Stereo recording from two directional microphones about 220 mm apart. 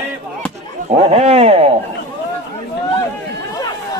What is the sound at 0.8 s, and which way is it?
Speech, 30° right (ahead or behind).